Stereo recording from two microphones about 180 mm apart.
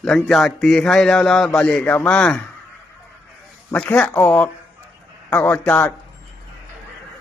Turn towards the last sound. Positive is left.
turn(degrees=10)  # may be behind; listen again after turning